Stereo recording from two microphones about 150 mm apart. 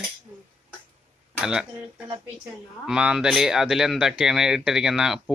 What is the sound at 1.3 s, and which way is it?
Speech, 5° right (ahead or behind).